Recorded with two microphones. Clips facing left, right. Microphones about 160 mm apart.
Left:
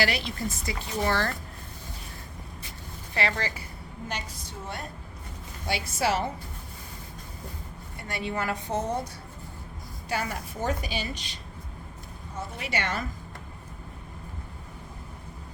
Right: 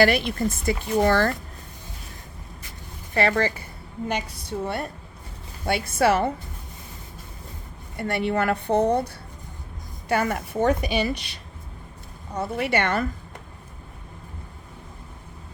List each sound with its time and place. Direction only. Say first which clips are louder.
0.0 s speech: right 8 dB; 55° right (ahead or behind)
3.2 s a woman's voice: right 8 dB; 55° right (ahead or behind)
7.9 s a woman's voice: right 8 dB; 60° right (ahead or behind)
10.1 s a woman's voice: right 8 dB; 60° right (ahead or behind)